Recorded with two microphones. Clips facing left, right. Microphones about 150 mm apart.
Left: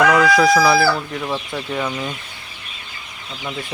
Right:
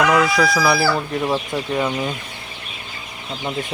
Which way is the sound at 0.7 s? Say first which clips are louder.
Left 2 dB; 20° right (ahead or behind).